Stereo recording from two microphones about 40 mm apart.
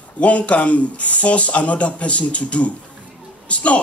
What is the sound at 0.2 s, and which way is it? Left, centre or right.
Speech, left.